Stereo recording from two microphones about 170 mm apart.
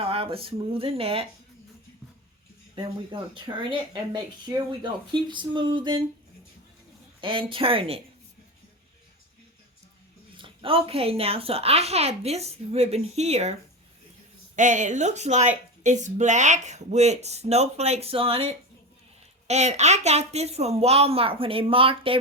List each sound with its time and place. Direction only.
0.1 s a woman's voice: 35° right (ahead or behind)
2.7 s speech: 30° right (ahead or behind)
7.2 s a woman's voice: 30° right (ahead or behind)
10.3 s a woman's voice: 30° right (ahead or behind)